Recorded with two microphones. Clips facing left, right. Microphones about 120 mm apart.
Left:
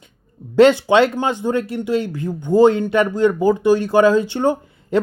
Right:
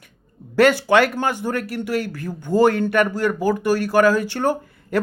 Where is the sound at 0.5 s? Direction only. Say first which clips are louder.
Left 3 dB; 20° left (ahead or behind).